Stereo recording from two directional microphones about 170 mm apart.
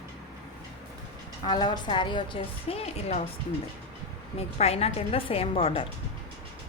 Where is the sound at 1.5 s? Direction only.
25° left (ahead or behind).